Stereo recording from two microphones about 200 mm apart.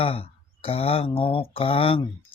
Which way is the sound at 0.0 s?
30° left (ahead or behind).